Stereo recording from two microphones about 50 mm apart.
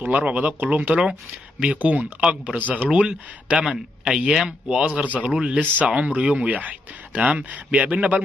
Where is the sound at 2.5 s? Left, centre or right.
Right.